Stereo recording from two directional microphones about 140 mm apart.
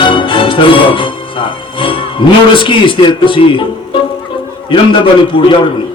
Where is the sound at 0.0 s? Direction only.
35° left (ahead or behind).